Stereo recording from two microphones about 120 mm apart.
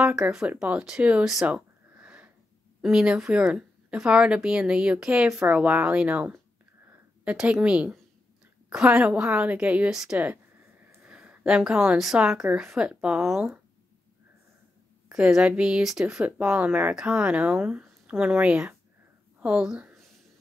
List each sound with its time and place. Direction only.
0.0 s speech: 5° right (ahead or behind)
10.1 s a sound: 15° right (ahead or behind)
11.1 s a woman's voice: 5° right (ahead or behind)
15.0 s a woman's voice: 5° right (ahead or behind)